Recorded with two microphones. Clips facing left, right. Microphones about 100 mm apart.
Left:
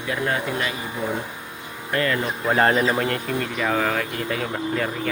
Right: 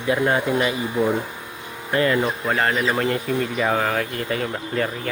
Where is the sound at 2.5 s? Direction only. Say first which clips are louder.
Left 5 dB; 30° left (ahead or behind).